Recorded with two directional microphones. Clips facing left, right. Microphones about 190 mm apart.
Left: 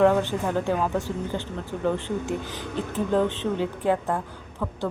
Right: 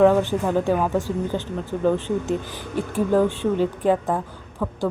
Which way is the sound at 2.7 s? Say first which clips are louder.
Right 4 dB; 10° right (ahead or behind).